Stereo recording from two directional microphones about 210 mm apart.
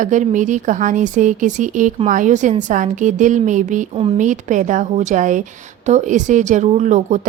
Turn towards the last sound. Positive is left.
turn(degrees=-35)  # may be behind; listen again after turning